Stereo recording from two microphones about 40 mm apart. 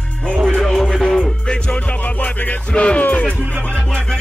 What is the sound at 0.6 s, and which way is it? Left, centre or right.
Music, centre.